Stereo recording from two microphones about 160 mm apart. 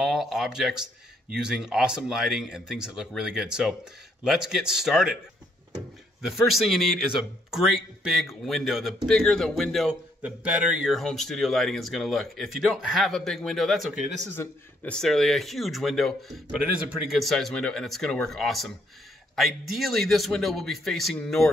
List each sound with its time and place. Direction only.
0.0 s speech: centre (ahead or behind)
6.3 s speech: centre (ahead or behind)
14.3 s speech: 10° left (ahead or behind)